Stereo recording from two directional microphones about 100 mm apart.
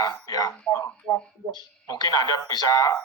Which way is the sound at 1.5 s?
45° left (ahead or behind).